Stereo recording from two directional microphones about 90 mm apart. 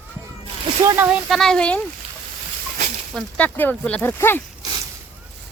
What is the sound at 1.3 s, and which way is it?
Speech, 5° left (ahead or behind).